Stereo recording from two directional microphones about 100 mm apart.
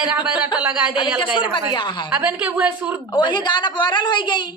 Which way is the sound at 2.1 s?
15° right (ahead or behind).